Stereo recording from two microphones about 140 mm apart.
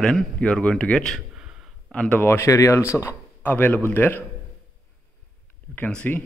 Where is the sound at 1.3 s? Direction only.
5° right (ahead or behind).